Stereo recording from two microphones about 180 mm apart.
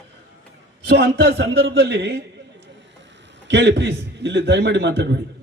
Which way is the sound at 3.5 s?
75° right (ahead or behind).